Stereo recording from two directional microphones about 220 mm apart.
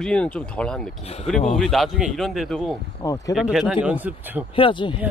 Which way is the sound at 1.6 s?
Centre (ahead or behind).